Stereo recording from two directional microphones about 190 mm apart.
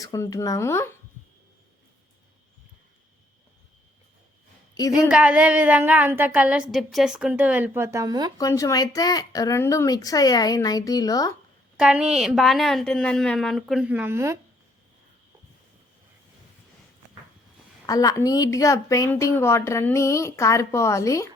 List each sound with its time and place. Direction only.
0.0 s speech: 20° left (ahead or behind)
4.7 s a sound: 20° left (ahead or behind)
5.0 s a woman's voice: 5° right (ahead or behind); by 8.3 s 20° right (ahead or behind)
8.4 s speech: 15° left (ahead or behind)
11.8 s a woman's voice: 5° right (ahead or behind)
17.8 s speech: 20° left (ahead or behind)